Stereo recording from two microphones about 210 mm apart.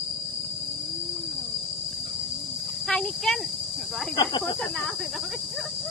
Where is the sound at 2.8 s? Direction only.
Centre (ahead or behind).